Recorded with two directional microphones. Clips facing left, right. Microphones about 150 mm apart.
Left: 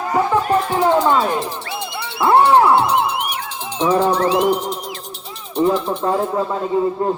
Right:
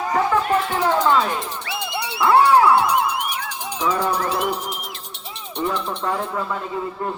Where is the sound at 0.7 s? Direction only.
20° left (ahead or behind).